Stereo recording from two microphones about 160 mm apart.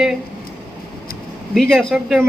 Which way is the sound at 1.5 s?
Centre (ahead or behind).